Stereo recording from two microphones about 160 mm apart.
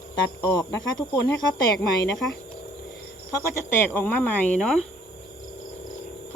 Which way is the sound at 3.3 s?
15° left (ahead or behind).